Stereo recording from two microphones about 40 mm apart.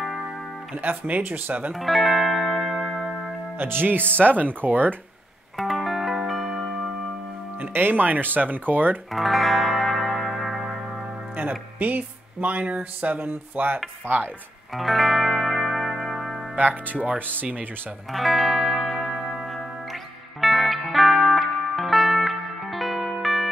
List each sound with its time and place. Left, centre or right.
0.7 s speech: right
1.7 s music: centre
3.5 s speech: right
5.6 s music: centre
7.5 s speech: right
9.1 s music: centre
11.4 s speech: right
11.8 s speech: right
13.3 s speech: right
14.7 s music: centre
16.5 s speech: right
18.1 s music: centre